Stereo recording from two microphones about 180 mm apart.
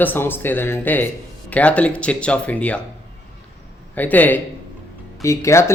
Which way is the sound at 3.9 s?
10° left (ahead or behind).